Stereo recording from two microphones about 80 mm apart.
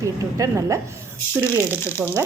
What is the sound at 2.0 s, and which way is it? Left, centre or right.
Speech, centre.